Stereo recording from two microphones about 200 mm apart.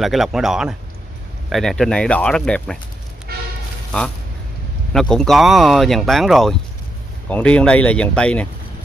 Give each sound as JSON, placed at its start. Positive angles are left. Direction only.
{"t": 0.0, "sound": "speech", "side_deg": 0}
{"t": 3.3, "sound": "music", "side_deg": -50}
{"t": 4.9, "sound": "speech", "side_deg": 5}